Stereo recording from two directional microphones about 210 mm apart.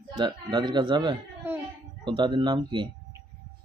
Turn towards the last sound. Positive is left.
turn(degrees=-20)  # may be behind; listen again after turning